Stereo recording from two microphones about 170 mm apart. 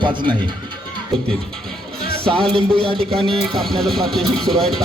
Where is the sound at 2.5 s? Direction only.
35° right (ahead or behind).